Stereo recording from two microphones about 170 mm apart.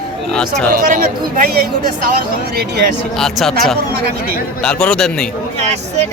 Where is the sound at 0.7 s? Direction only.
55° right (ahead or behind).